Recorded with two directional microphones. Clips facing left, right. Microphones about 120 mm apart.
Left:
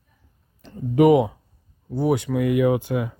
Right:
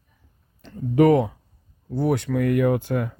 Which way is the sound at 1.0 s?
10° left (ahead or behind).